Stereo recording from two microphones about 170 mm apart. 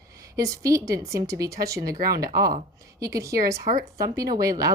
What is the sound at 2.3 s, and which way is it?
Speech, 20° right (ahead or behind).